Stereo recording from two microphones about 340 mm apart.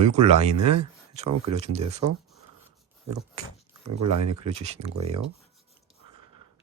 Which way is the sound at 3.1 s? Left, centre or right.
Right.